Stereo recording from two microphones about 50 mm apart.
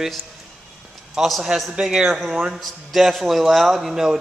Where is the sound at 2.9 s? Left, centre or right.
Centre.